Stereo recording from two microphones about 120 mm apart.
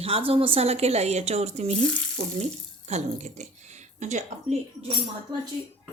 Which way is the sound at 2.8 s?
70° right (ahead or behind).